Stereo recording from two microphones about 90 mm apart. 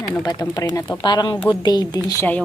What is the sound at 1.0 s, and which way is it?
A woman's voice, 55° left (ahead or behind).